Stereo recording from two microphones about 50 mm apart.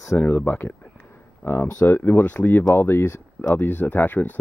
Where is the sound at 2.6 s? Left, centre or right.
Left.